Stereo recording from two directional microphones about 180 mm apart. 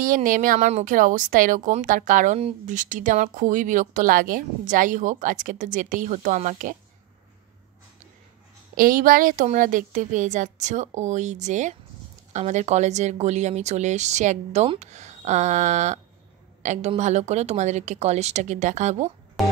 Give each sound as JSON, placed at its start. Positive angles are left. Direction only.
{"t": 0.0, "sound": "a woman's voice", "side_deg": -50}
{"t": 8.7, "sound": "a woman's voice", "side_deg": -50}